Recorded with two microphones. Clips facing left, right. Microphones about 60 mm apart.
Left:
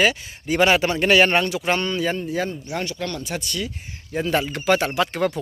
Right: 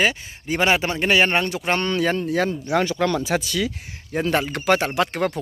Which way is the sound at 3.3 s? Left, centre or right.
Right.